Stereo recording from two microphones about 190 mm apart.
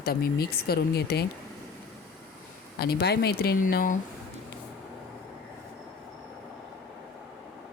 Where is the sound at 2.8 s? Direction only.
55° left (ahead or behind).